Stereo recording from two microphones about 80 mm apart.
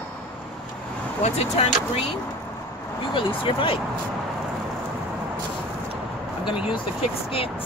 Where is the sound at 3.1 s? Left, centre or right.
Left.